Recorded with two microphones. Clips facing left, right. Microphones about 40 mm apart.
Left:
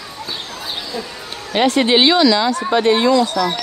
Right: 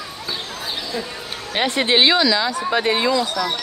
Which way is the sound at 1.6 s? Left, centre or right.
Centre.